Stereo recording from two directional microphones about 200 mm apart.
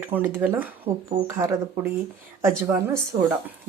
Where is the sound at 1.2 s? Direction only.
15° right (ahead or behind).